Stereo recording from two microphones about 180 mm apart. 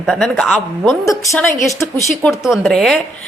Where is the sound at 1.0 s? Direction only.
15° left (ahead or behind).